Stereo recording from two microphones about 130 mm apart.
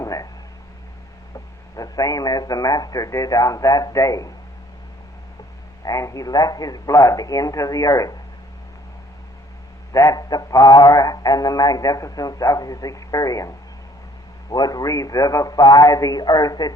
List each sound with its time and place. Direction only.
0.0 s a sound: 25° left (ahead or behind)
1.3 s a man's voice: 25° left (ahead or behind)
5.8 s speech: 25° left (ahead or behind)
9.9 s speech: 25° left (ahead or behind)
14.5 s speech: 30° left (ahead or behind)